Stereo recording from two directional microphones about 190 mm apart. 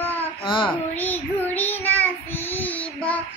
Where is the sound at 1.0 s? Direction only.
10° left (ahead or behind).